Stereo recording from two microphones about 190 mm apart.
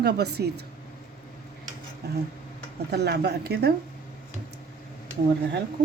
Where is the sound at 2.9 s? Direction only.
60° right (ahead or behind).